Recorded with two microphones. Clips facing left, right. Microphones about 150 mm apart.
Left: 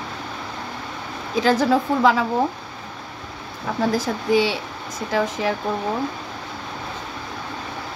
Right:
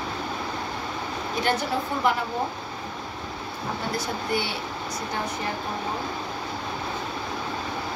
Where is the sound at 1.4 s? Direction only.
90° left.